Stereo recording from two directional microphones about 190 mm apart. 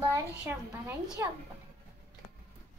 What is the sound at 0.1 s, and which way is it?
A woman's voice, 10° right (ahead or behind).